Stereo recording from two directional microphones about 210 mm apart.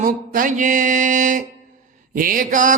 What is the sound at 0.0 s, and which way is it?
Speech, 40° right (ahead or behind).